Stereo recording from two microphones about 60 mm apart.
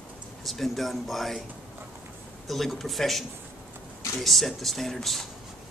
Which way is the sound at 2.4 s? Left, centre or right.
Centre.